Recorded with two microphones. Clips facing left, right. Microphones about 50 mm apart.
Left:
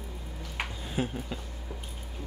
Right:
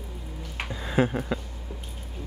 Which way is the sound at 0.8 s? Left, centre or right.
Right.